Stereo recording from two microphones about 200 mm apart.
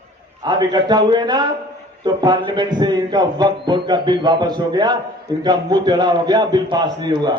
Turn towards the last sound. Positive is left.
turn(degrees=-20)  # may be behind; listen again after turning